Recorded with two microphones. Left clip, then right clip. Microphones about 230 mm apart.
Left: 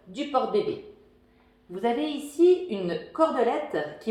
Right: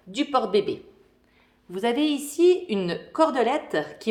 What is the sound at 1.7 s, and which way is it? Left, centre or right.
A woman's voice, right.